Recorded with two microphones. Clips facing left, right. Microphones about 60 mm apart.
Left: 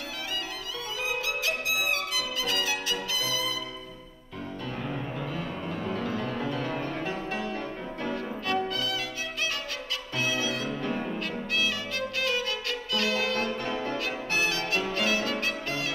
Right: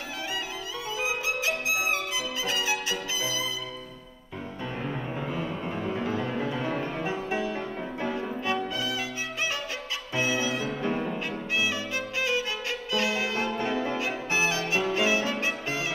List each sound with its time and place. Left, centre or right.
1.0 s music: centre
4.8 s music: centre
10.8 s violin: centre
15.4 s music: centre